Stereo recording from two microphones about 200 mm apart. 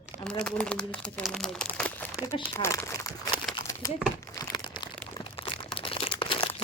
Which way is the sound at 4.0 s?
5° right (ahead or behind).